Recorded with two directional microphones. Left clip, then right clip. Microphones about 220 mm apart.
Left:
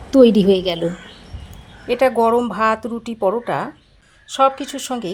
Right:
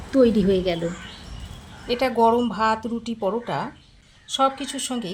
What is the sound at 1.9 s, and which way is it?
Speech, 25° left (ahead or behind).